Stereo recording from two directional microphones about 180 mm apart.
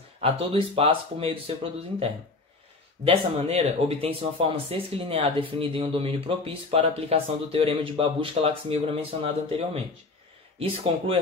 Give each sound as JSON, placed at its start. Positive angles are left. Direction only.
{"t": 0.2, "sound": "speech", "side_deg": -30}
{"t": 10.6, "sound": "speech", "side_deg": -30}